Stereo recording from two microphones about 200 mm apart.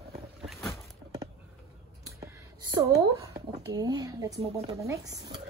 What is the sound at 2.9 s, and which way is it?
Speech, 15° right (ahead or behind).